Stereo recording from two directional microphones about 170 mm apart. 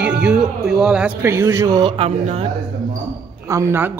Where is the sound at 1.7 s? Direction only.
30° right (ahead or behind).